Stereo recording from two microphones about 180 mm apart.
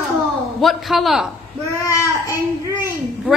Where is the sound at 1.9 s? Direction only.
15° left (ahead or behind).